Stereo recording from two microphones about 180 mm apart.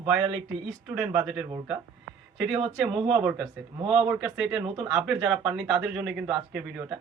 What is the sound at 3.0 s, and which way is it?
Speech, 5° right (ahead or behind).